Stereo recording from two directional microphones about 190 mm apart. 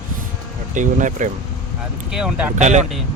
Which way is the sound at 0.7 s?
40° right (ahead or behind).